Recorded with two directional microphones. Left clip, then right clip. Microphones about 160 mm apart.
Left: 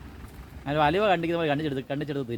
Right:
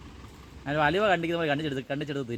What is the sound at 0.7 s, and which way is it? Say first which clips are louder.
Speech: left 1 dB; 30° right (ahead or behind).